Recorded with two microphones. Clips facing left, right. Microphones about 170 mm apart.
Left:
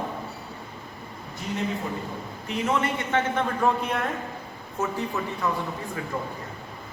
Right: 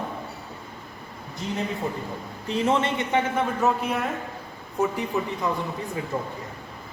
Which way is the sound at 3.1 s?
10° right (ahead or behind).